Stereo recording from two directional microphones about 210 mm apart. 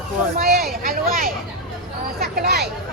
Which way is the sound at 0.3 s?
45° right (ahead or behind).